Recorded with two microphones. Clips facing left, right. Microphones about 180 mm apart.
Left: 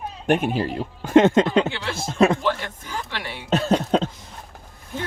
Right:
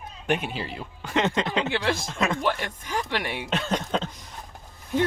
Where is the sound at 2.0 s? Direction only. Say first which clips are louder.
Left 9 dB; 30° left (ahead or behind).